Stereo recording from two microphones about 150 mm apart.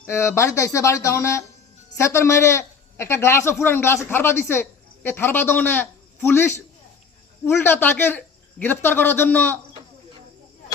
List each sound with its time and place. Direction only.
0.1 s a man's voice: 20° left (ahead or behind)